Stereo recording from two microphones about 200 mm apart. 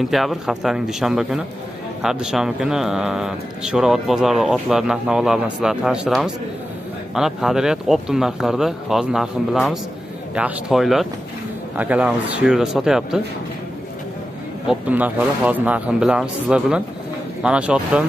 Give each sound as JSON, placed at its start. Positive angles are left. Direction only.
{"t": 0.1, "sound": "speech", "side_deg": 0}
{"t": 14.7, "sound": "speech", "side_deg": -10}